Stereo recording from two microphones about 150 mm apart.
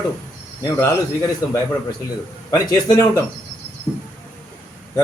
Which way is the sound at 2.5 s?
20° left (ahead or behind).